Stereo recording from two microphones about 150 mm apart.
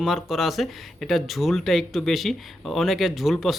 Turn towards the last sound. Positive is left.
turn(degrees=0)  # may be behind; listen again after turning